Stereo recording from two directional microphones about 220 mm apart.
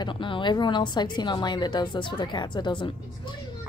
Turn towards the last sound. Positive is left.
turn(degrees=20)  # may be behind; listen again after turning